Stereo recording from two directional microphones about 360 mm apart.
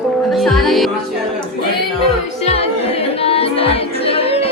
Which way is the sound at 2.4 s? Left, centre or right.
Centre.